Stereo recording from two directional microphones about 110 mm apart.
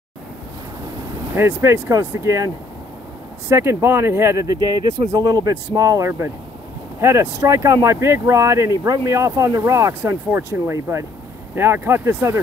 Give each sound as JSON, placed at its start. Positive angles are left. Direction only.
{"t": 1.3, "sound": "speech", "side_deg": -25}